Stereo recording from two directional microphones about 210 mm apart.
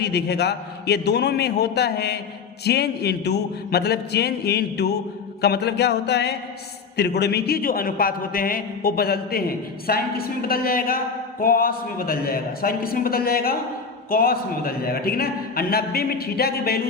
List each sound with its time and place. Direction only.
0.0 s a man's voice: 50° left (ahead or behind)